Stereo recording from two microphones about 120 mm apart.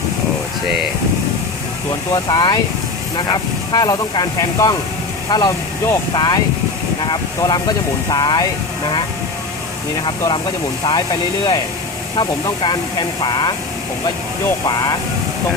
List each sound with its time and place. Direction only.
2.2 s speech: 35° left (ahead or behind)
10.0 s speech: 45° left (ahead or behind)
14.7 s speech: 35° left (ahead or behind)